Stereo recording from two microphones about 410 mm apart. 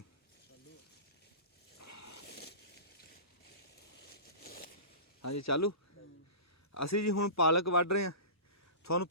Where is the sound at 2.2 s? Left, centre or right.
Left.